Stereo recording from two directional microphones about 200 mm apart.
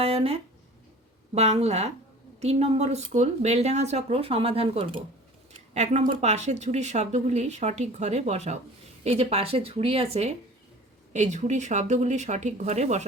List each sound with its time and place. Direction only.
0.0 s speech: 30° right (ahead or behind)
1.4 s speech: 35° right (ahead or behind)